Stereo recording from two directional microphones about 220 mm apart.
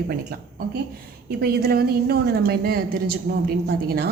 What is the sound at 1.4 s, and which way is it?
A woman's voice, 45° right (ahead or behind).